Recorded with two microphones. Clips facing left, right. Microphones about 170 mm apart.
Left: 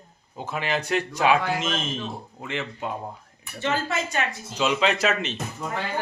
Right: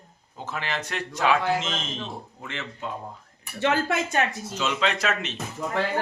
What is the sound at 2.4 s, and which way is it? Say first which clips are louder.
Speech: left 6 dB; 15° left (ahead or behind).